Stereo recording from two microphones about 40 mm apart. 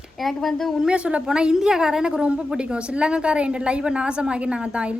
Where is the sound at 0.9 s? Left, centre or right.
Right.